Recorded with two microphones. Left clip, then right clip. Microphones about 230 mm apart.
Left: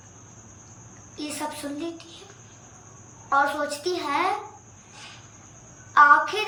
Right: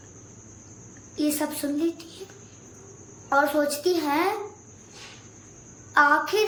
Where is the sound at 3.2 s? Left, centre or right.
Centre.